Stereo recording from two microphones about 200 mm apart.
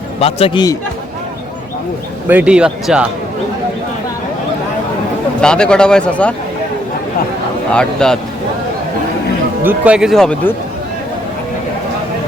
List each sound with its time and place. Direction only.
0.2 s speech: 30° left (ahead or behind)
2.2 s a man's voice: 5° right (ahead or behind)
5.4 s a man's voice: 5° left (ahead or behind)
7.7 s a man's voice: 5° left (ahead or behind)
9.6 s a man's voice: 5° right (ahead or behind)